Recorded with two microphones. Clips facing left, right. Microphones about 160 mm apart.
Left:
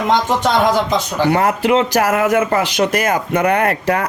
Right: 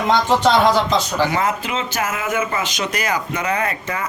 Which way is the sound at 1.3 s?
60° left (ahead or behind).